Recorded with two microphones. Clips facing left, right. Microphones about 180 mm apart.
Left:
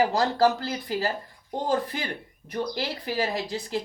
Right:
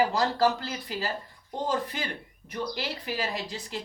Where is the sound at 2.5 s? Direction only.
35° left (ahead or behind).